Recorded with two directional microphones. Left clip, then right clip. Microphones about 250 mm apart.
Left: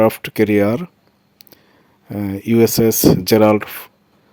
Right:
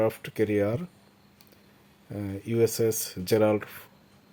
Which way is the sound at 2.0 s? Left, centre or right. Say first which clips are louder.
Left 13 dB; left.